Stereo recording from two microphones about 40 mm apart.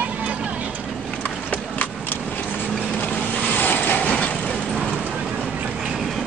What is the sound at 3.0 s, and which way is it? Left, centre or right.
Vehicle, left.